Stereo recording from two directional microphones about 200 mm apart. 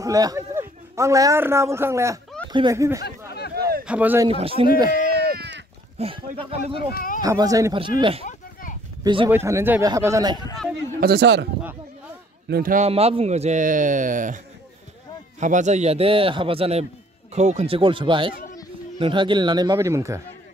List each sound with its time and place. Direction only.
0.0 s a man's voice: 15° right (ahead or behind)
3.5 s a sound: 50° right (ahead or behind)
3.8 s speech: 5° right (ahead or behind)
4.4 s a man's voice: 30° right (ahead or behind)
5.1 s a sound: 55° right (ahead or behind)
5.9 s a man's voice: 30° right (ahead or behind)
6.9 s speech: 45° left (ahead or behind)
7.2 s a man's voice: 15° right (ahead or behind)
9.3 s speech: 10° right (ahead or behind)
11.0 s speech: 55° right (ahead or behind)
12.4 s a man's voice: 50° right (ahead or behind)
15.4 s a man's voice: 35° right (ahead or behind); by 20.2 s 15° right (ahead or behind)